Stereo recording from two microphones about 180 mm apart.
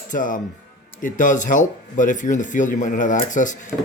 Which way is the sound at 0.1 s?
45° left (ahead or behind).